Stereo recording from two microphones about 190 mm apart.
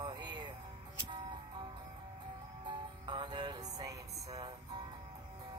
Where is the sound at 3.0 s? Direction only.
25° right (ahead or behind).